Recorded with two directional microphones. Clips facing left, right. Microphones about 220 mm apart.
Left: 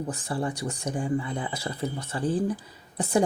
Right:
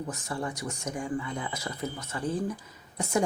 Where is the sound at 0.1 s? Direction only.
30° left (ahead or behind).